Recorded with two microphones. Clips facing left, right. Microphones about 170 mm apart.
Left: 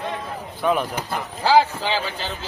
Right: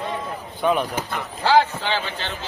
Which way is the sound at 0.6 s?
Centre (ahead or behind).